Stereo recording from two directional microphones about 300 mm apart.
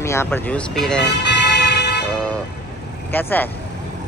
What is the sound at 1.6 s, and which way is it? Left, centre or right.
Vehicle, left.